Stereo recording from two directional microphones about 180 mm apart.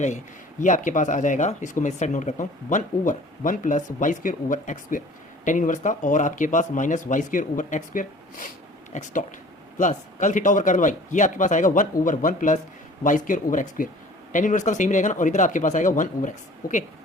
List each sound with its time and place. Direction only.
0.6 s speech: 45° left (ahead or behind)